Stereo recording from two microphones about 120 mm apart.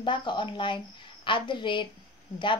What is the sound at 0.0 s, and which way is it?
A woman's voice, 40° left (ahead or behind).